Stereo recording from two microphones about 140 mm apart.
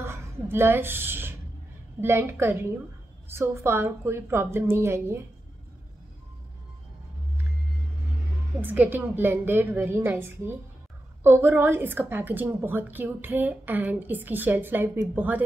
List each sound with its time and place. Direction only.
0.0 s a woman's voice: 20° right (ahead or behind)
8.5 s a woman's voice: 10° right (ahead or behind)